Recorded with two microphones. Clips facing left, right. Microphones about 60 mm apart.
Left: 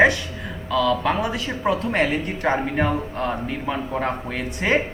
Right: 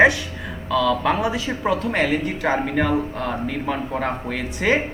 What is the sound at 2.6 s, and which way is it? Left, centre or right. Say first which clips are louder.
Speech: right 1 dB; centre.